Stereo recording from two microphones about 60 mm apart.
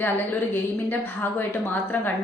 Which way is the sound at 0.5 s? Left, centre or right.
Left.